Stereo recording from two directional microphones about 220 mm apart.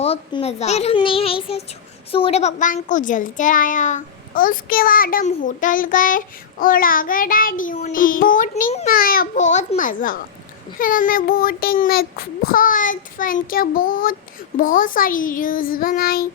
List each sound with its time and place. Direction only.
0.0 s a child's voice: 25° left (ahead or behind)